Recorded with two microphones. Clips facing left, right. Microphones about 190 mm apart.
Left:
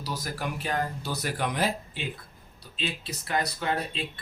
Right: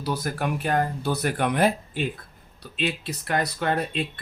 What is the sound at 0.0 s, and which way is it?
Speech, 55° right (ahead or behind).